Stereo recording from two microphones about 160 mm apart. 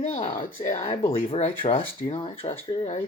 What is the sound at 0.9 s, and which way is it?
Speech, 35° left (ahead or behind).